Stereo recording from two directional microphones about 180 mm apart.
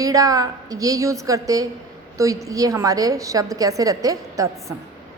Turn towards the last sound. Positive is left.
turn(degrees=-20)  # may be behind; listen again after turning